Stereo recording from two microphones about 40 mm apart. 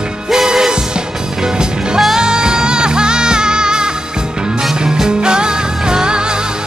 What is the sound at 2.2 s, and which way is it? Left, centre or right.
Music, centre.